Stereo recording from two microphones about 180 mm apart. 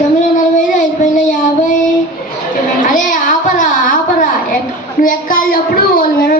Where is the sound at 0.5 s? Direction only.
45° left (ahead or behind).